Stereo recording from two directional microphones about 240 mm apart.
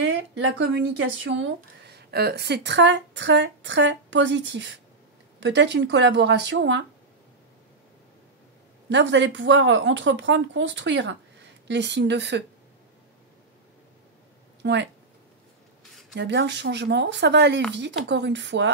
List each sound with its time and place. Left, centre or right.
0.0 s speech: right
8.8 s speech: right
14.6 s speech: right
15.9 s a sound: centre
16.2 s speech: right